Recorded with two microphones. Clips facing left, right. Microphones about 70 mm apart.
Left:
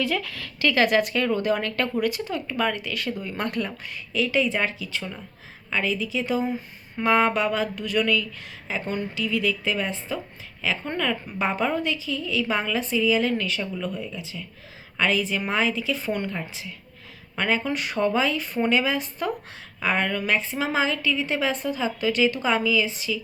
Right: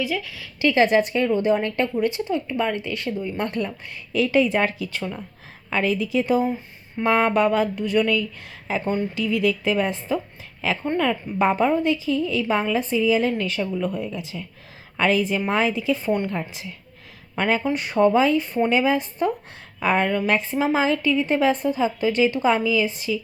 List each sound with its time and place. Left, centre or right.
0.0 s speech: centre
0.7 s a woman's voice: right
13.9 s a woman's voice: right